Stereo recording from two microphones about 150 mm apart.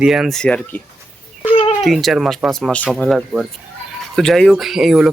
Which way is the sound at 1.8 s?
Centre (ahead or behind).